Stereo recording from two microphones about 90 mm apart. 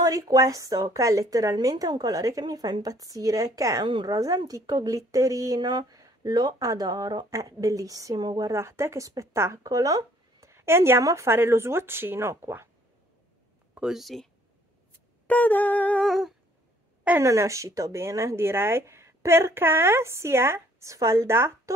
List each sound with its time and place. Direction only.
0.0 s speech: 45° right (ahead or behind)
3.8 s a woman's voice: 55° right (ahead or behind)
8.5 s speech: 30° right (ahead or behind)
13.7 s speech: 5° right (ahead or behind)
15.2 s humming: 20° left (ahead or behind)
16.0 s speech: centre (ahead or behind)
17.2 s speech: 35° right (ahead or behind)